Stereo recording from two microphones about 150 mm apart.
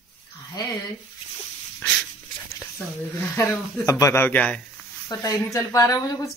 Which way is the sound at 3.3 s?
20° left (ahead or behind).